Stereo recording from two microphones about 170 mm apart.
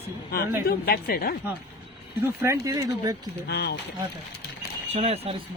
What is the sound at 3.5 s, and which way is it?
Speech, 70° left (ahead or behind).